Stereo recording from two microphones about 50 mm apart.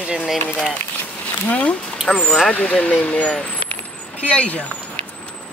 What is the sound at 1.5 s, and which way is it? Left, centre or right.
Speech, left.